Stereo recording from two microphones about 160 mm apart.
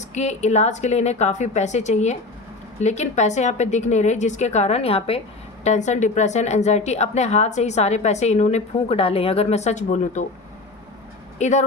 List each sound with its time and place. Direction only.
0.0 s speech: 45° left (ahead or behind)
11.3 s speech: 45° left (ahead or behind)